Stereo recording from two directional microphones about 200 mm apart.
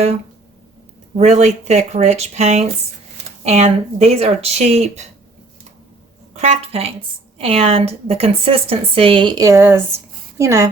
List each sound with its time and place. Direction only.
1.2 s speech: 35° right (ahead or behind)
6.3 s a woman's voice: 35° right (ahead or behind); by 10.7 s 15° right (ahead or behind)